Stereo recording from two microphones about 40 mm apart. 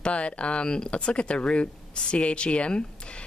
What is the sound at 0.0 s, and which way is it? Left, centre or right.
Speech, left.